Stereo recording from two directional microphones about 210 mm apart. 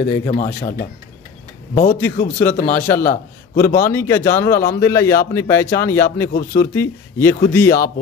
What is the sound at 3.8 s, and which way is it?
A man's voice, 10° left (ahead or behind).